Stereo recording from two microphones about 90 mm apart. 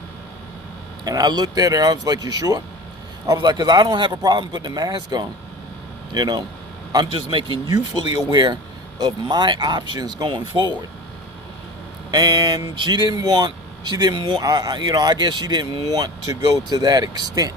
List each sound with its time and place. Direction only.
1.0 s speech: 45° right (ahead or behind)
3.3 s speech: 50° right (ahead or behind)
7.1 s a man's voice: 70° right (ahead or behind)
8.0 s speech: 55° right (ahead or behind)
12.1 s speech: 50° right (ahead or behind)
12.8 s speech: 55° right (ahead or behind)